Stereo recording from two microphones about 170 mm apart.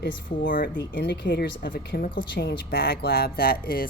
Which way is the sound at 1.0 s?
85° left.